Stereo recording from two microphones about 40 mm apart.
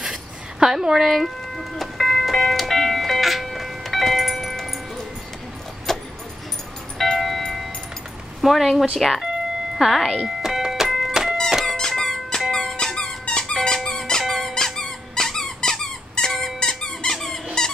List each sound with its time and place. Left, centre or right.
0.0 s a sound: centre
7.0 s music: centre
8.4 s speech: centre
9.8 s doorbell: centre
11.6 s squeak: centre
13.2 s dog: left
13.8 s squeak: centre